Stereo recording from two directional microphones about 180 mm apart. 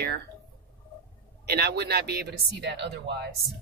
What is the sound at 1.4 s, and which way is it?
Speech, 60° right (ahead or behind).